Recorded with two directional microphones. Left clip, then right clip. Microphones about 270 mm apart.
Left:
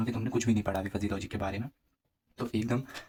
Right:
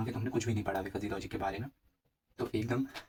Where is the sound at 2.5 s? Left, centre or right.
Left.